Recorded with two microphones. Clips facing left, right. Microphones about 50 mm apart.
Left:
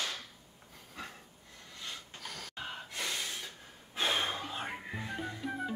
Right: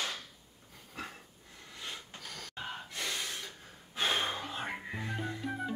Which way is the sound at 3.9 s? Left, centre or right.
Centre.